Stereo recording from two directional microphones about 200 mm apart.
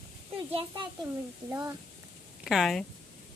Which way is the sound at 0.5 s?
30° right (ahead or behind).